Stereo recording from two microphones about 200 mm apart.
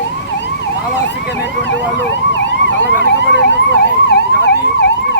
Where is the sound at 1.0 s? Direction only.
65° left (ahead or behind).